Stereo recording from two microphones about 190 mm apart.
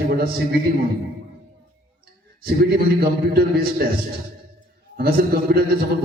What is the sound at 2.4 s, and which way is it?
A man's voice, 55° right (ahead or behind).